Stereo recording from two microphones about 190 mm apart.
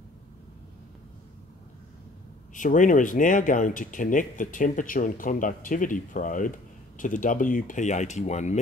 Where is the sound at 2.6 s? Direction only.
45° left (ahead or behind).